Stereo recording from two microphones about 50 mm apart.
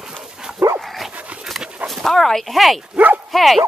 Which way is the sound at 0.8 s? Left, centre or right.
Centre.